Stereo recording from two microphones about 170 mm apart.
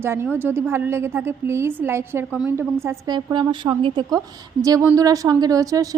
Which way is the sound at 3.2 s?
25° right (ahead or behind).